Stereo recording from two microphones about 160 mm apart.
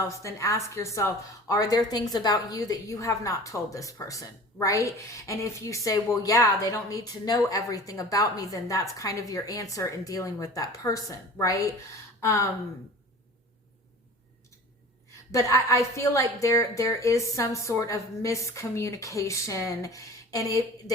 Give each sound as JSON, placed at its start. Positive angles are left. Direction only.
{"t": 0.2, "sound": "a woman's voice", "side_deg": 20}
{"t": 15.3, "sound": "a woman's voice", "side_deg": 20}